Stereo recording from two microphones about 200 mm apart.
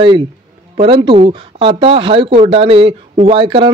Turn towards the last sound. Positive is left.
turn(degrees=-25)  # may be behind; listen again after turning